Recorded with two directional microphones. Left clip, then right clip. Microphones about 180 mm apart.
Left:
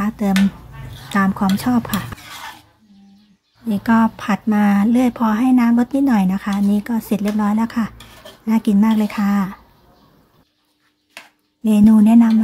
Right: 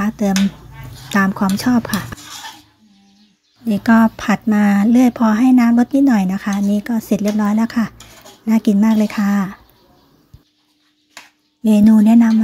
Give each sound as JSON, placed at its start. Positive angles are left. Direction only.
{"t": 0.0, "sound": "speech", "side_deg": -15}
{"t": 3.6, "sound": "speech", "side_deg": -20}
{"t": 11.6, "sound": "speech", "side_deg": -15}